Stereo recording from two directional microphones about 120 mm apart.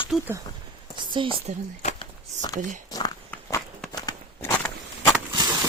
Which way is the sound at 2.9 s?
35° left (ahead or behind).